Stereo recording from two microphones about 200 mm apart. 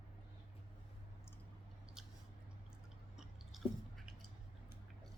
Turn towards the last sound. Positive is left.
turn(degrees=0)  # may be behind; listen again after turning